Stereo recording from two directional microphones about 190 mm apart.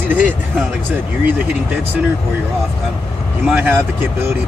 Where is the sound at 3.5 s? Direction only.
10° right (ahead or behind).